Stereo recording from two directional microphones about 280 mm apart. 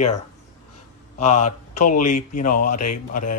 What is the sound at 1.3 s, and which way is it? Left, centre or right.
Speech, left.